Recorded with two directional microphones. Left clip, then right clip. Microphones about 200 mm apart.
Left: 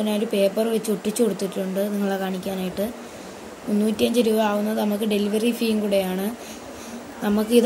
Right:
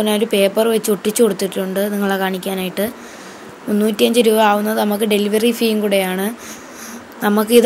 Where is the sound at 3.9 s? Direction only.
15° right (ahead or behind).